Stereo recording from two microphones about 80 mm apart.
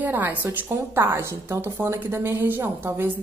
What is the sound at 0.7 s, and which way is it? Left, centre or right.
A woman's voice, right.